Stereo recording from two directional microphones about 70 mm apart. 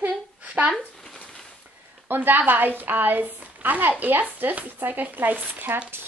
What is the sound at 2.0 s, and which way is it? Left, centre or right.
A woman's voice, right.